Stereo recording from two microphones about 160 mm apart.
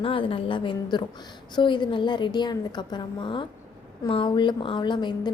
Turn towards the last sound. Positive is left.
turn(degrees=30)  # may be behind; listen again after turning